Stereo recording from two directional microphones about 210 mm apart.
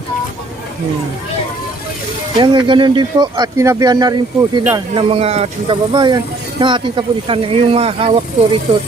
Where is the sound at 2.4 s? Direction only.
20° right (ahead or behind).